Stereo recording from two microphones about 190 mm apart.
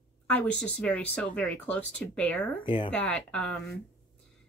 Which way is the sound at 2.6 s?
25° left (ahead or behind).